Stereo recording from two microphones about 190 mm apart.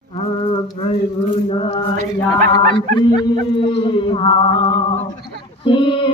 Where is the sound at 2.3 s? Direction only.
25° left (ahead or behind).